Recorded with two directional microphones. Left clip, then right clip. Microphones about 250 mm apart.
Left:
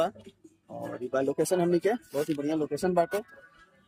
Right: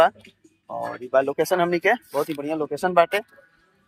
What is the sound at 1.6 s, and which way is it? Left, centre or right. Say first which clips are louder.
Speech: right 4 dB; right.